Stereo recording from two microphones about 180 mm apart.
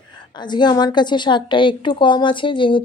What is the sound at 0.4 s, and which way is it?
A woman's voice, 25° left (ahead or behind).